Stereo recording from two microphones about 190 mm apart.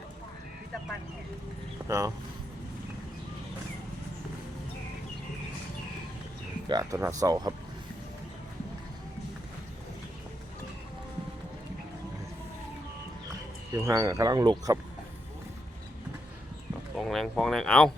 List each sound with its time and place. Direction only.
1.9 s speech: 15° right (ahead or behind)
6.7 s speech: 20° right (ahead or behind)
13.7 s speech: 15° right (ahead or behind)
17.0 s speech: centre (ahead or behind)